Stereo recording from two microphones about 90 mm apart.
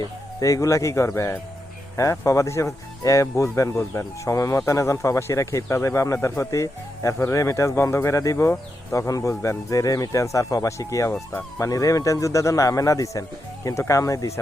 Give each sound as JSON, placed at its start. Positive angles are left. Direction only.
{"t": 0.0, "sound": "speech", "side_deg": 40}